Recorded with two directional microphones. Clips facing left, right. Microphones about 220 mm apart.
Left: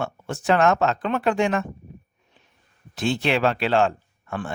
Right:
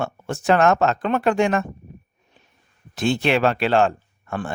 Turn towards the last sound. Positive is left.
turn(degrees=-45)  # may be behind; listen again after turning